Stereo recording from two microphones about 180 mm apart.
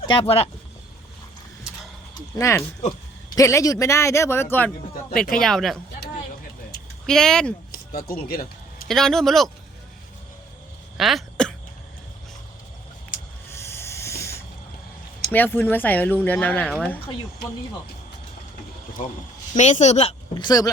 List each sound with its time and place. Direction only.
0.0 s speech: 30° left (ahead or behind)
2.4 s a man's voice: 15° left (ahead or behind); by 5.8 s centre (ahead or behind)
7.1 s speech: 5° left (ahead or behind)
7.7 s keys jangling: 55° left (ahead or behind)
8.9 s speech: 5° left (ahead or behind)
10.9 s throat clearing: centre (ahead or behind)
13.5 s snake: 15° left (ahead or behind)
15.3 s a man's voice: 10° left (ahead or behind)
19.5 s speech: 40° left (ahead or behind); by 20.7 s 25° left (ahead or behind)